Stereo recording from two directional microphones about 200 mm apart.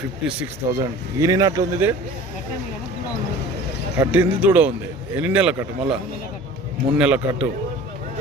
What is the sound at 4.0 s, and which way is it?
Speech, 10° right (ahead or behind).